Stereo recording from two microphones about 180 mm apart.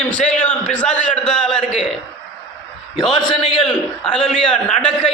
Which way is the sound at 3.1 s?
25° left (ahead or behind).